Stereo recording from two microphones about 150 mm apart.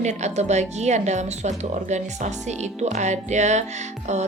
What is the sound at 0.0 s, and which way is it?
A woman's voice, 50° right (ahead or behind).